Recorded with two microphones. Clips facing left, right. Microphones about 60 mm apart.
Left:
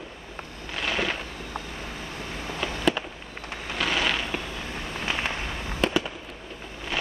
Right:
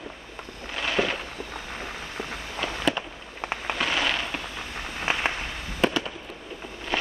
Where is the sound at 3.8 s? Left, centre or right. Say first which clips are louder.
Left 1 dB; centre.